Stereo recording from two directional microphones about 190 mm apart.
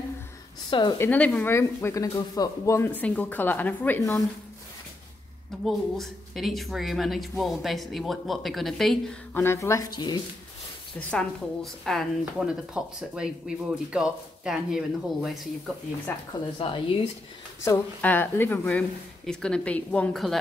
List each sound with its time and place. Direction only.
0.7 s speech: 25° left (ahead or behind)
0.9 s speech: 10° left (ahead or behind)
5.7 s speech: centre (ahead or behind); by 10.2 s 20° left (ahead or behind)
11.0 s speech: 5° left (ahead or behind)
16.1 s speech: 10° left (ahead or behind)
16.5 s speech: 30° left (ahead or behind)
17.6 s speech: 10° left (ahead or behind)